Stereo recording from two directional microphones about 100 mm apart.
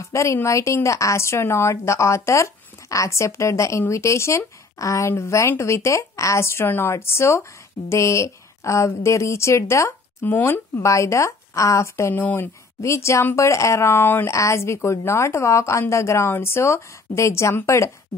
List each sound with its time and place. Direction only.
0.0 s speech: 30° left (ahead or behind)
10.8 s speech: 30° left (ahead or behind)